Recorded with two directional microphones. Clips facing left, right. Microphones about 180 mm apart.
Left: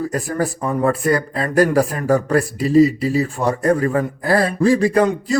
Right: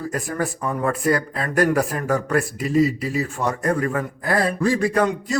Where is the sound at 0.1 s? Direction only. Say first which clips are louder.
Left 4 dB; 35° left (ahead or behind).